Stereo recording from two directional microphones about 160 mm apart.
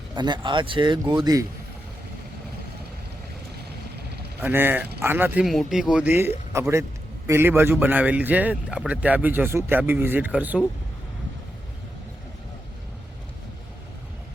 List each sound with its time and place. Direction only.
0.2 s speech: 30° right (ahead or behind)
4.4 s a man's voice: 15° right (ahead or behind)
5.5 s a man's voice: centre (ahead or behind)